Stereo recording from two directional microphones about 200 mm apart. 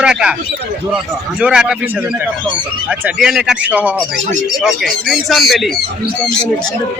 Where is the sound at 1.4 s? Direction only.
5° right (ahead or behind).